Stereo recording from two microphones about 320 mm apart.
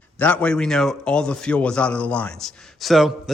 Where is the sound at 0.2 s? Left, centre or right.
Centre.